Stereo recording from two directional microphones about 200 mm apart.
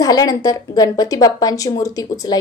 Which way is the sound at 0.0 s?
20° left (ahead or behind).